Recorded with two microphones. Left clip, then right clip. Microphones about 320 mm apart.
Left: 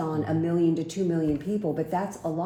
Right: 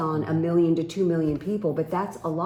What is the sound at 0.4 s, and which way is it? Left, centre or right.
Speech, centre.